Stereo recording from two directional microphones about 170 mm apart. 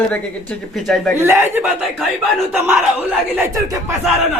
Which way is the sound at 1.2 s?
15° right (ahead or behind).